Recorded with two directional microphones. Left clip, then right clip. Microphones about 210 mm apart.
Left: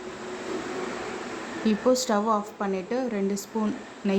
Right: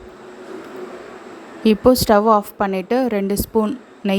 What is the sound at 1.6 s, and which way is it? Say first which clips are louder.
A woman's voice: right 10 dB; 40° right (ahead or behind).